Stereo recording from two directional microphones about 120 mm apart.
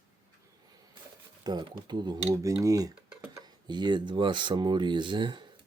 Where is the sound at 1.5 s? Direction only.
35° right (ahead or behind).